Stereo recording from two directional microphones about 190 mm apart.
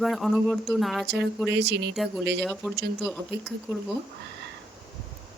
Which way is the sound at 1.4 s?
65° right (ahead or behind).